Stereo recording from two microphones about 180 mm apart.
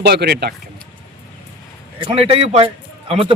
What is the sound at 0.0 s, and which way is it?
Speech, 65° right (ahead or behind).